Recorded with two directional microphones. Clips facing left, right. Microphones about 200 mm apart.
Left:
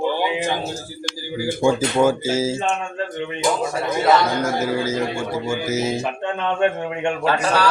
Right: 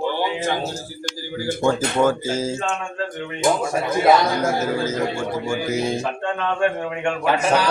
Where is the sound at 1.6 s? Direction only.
10° left (ahead or behind).